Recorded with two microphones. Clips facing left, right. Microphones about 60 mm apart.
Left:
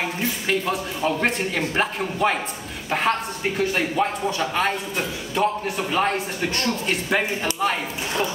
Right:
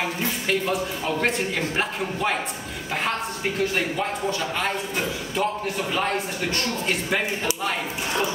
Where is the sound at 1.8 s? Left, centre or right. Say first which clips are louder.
Left 6 dB; centre.